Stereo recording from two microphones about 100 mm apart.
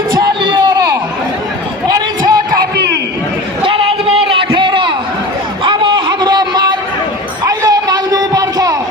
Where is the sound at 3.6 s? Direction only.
60° right (ahead or behind).